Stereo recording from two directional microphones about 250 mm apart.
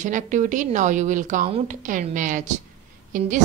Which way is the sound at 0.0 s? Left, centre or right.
Right.